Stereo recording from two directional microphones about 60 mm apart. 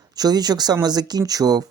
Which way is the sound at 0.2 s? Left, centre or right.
Right.